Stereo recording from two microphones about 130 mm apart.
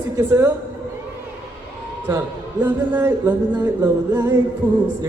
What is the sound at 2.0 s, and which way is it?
A man's voice, 20° right (ahead or behind).